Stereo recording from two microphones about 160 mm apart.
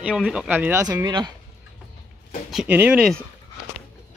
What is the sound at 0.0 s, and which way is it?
Speech, 5° right (ahead or behind).